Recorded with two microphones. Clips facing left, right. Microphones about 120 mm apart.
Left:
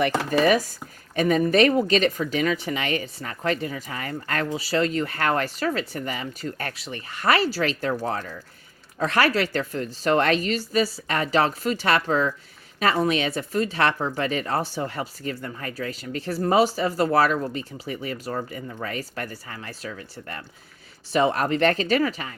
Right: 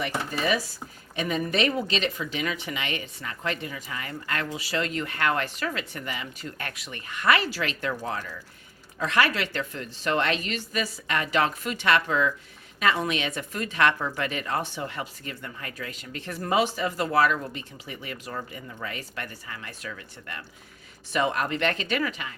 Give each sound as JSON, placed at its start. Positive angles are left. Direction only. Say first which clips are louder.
{"t": 0.0, "sound": "speech", "louder": "left 7 dB", "side_deg": 90}
{"t": 0.3, "sound": "speech", "louder": "left 8 dB", "side_deg": 55}